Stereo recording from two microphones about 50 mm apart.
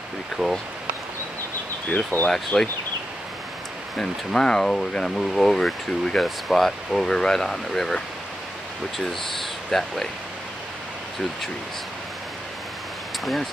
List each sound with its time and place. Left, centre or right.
0.4 s speech: centre
2.2 s speech: centre
4.0 s speech: centre
13.2 s speech: centre